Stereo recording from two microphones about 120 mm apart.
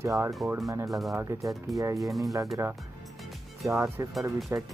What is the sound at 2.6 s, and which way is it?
Speech, 20° right (ahead or behind).